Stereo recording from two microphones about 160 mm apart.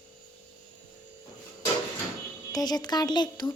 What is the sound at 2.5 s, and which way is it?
Music, 25° left (ahead or behind).